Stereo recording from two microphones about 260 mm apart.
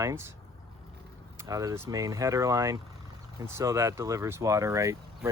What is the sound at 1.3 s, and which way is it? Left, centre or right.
Speech, centre.